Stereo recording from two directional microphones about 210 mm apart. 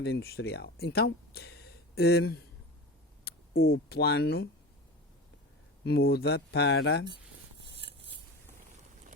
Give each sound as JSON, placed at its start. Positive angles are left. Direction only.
{"t": 0.0, "sound": "speech", "side_deg": 50}
{"t": 3.3, "sound": "a sound", "side_deg": 50}
{"t": 3.6, "sound": "speech", "side_deg": 50}
{"t": 5.8, "sound": "speech", "side_deg": 50}